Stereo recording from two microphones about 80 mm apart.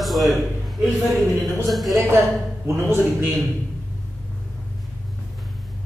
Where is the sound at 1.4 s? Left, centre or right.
Centre.